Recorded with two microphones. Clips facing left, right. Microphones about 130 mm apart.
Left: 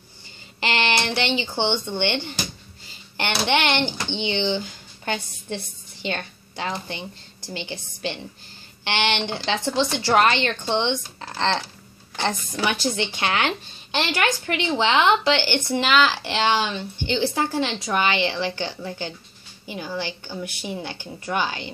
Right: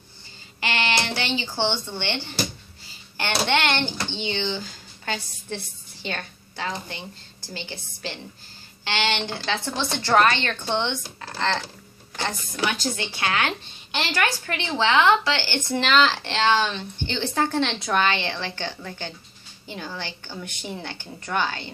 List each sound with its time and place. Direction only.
0.6 s speech: 25° left (ahead or behind)
6.0 s speech: 20° left (ahead or behind)
12.9 s speech: 25° left (ahead or behind)